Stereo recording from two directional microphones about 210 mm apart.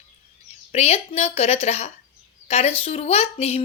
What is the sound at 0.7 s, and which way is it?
Speech, 30° left (ahead or behind).